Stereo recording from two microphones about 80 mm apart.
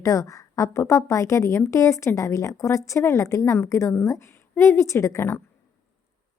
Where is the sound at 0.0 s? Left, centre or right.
Left.